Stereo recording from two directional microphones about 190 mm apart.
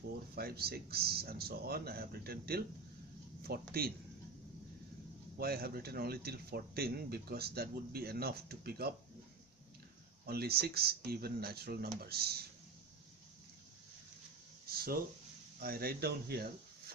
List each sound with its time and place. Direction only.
0.3 s speech: 55° right (ahead or behind)
5.4 s speech: 55° right (ahead or behind)
10.2 s speech: 55° right (ahead or behind)
15.6 s speech: 55° right (ahead or behind)